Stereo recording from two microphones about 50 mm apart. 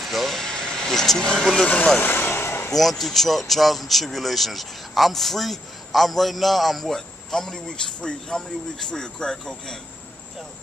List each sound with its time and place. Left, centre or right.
0.0 s vehicle: centre
2.0 s vehicle: left
2.7 s speech: centre